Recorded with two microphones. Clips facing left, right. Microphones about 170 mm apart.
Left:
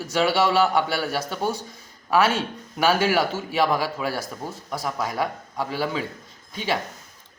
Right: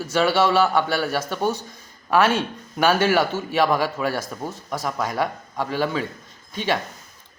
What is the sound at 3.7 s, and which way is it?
Speech, 50° right (ahead or behind).